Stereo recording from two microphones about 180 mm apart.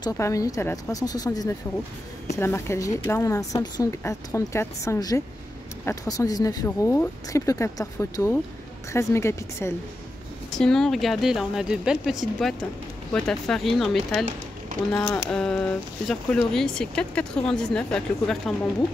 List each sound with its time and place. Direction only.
0.0 s a woman's voice: 20° left (ahead or behind)
10.5 s speech: centre (ahead or behind)